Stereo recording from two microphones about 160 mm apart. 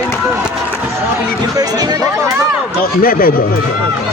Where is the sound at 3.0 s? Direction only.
65° left (ahead or behind).